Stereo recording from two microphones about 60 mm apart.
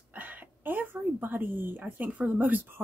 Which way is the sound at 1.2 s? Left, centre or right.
Right.